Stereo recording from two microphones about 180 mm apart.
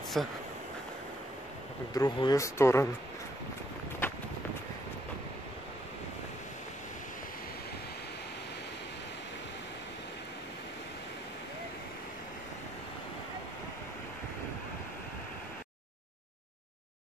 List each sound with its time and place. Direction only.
0.2 s speech: centre (ahead or behind)
2.0 s speech: 25° left (ahead or behind)